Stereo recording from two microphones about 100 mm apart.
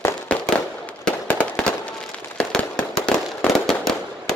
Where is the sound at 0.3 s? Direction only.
10° left (ahead or behind).